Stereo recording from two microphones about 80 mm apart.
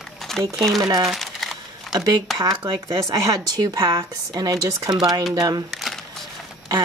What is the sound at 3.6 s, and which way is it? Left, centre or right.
Speech, right.